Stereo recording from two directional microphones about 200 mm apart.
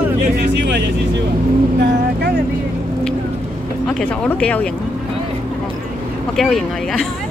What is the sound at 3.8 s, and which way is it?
Speech, 5° left (ahead or behind).